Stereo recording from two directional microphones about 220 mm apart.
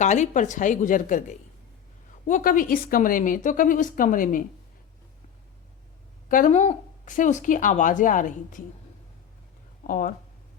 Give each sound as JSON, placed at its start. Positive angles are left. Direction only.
{"t": 0.0, "sound": "speech", "side_deg": 35}
{"t": 6.2, "sound": "speech", "side_deg": 35}
{"t": 9.8, "sound": "speech", "side_deg": 35}